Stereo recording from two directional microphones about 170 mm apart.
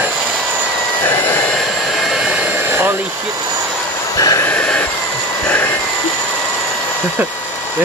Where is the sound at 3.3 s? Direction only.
20° right (ahead or behind).